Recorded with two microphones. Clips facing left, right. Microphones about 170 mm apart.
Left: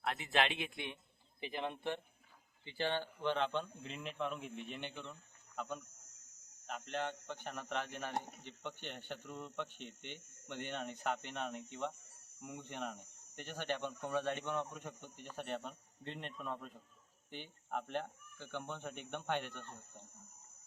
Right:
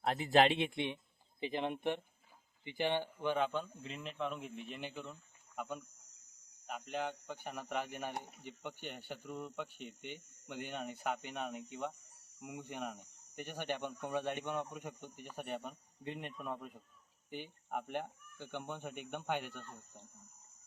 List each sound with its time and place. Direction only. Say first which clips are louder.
0.0 s a man's voice: right 6 dB; 35° right (ahead or behind); by 5.8 s centre (ahead or behind)
5.9 s cricket: left 4 dB; 45° left (ahead or behind)
6.7 s a man's voice: right 1 dB; 10° right (ahead or behind)
8.1 s speech: left 4 dB; 45° left (ahead or behind)
8.4 s a man's voice: right 1 dB; 10° right (ahead or behind)